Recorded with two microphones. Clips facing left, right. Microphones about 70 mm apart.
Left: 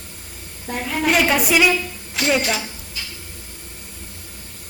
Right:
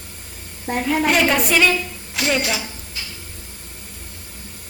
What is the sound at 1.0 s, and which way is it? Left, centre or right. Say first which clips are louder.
A woman's voice: left 3 dB; centre.